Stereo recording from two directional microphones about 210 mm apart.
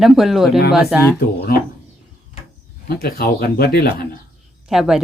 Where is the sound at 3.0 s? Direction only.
45° left (ahead or behind).